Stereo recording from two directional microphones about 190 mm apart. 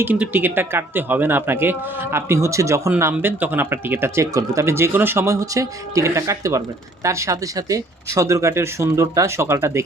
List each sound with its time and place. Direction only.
0.0 s speech: 10° right (ahead or behind)